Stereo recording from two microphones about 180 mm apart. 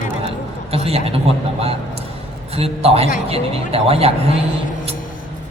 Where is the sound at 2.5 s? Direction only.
35° right (ahead or behind).